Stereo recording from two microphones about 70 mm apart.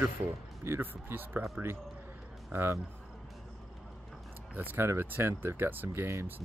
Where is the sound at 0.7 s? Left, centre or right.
Right.